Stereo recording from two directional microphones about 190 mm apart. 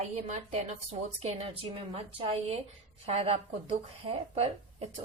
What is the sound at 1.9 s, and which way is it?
A woman's voice, 35° right (ahead or behind).